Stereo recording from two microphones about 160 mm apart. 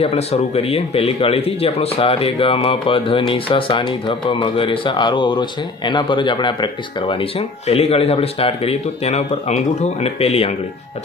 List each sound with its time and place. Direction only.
0.0 s speech: 40° left (ahead or behind)